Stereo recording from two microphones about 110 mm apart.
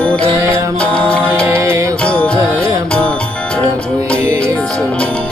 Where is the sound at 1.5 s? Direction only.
25° right (ahead or behind).